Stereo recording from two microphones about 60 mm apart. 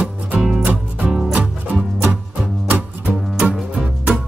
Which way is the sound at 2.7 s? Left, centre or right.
Right.